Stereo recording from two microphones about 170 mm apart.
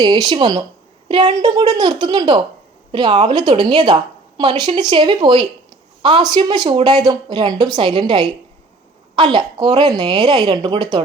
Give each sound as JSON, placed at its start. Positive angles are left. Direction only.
{"t": 0.0, "sound": "a woman's voice", "side_deg": -25}